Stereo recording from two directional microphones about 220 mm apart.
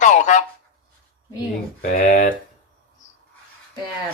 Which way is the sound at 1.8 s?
40° left (ahead or behind).